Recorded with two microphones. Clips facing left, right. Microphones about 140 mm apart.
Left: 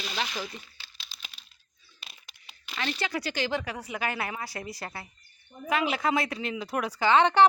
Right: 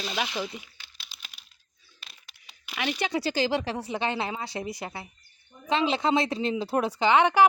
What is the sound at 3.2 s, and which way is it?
Speech, 30° right (ahead or behind).